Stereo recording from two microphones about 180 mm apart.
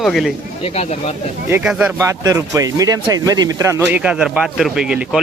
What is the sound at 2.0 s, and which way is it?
Speech, 15° right (ahead or behind).